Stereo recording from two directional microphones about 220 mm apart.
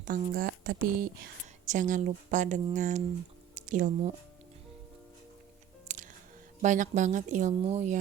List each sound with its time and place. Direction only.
0.0 s speech: 40° right (ahead or behind)
5.9 s music: 35° right (ahead or behind)
6.6 s speech: 35° right (ahead or behind)